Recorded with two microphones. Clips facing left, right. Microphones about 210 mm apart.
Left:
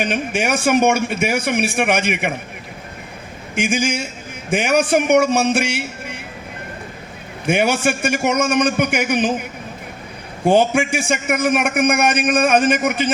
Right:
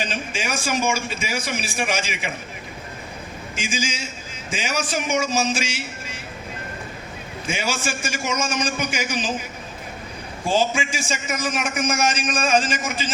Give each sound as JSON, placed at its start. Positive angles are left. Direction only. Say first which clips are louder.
{"t": 0.0, "sound": "a man's voice", "louder": "left 8 dB", "side_deg": 60}
{"t": 3.5, "sound": "a man's voice", "louder": "left 9 dB", "side_deg": 60}
{"t": 7.4, "sound": "a man's voice", "louder": "left 10 dB", "side_deg": 60}